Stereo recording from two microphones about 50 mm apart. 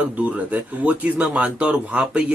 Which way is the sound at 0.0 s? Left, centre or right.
Right.